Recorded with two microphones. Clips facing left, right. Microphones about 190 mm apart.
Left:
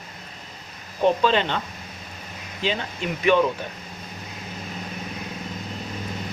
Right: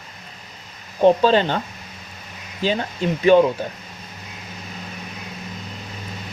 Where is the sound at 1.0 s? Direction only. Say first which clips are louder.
Right 5 dB; 35° right (ahead or behind).